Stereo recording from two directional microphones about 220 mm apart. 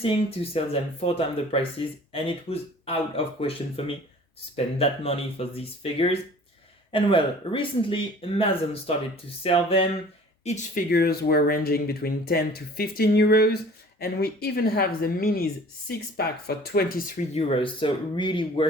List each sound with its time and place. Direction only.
0.0 s speech: 25° left (ahead or behind)
10.8 s speech: 45° left (ahead or behind)
17.3 s speech: 25° left (ahead or behind)